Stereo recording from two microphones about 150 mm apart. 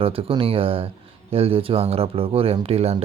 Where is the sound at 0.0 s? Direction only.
40° right (ahead or behind).